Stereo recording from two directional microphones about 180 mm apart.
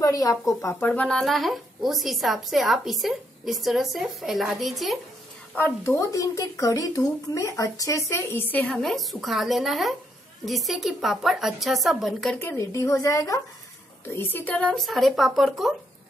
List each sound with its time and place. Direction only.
0.0 s speech: 20° left (ahead or behind); by 4.9 s centre (ahead or behind)
5.5 s a woman's voice: 15° left (ahead or behind)
12.4 s a woman's voice: 15° left (ahead or behind)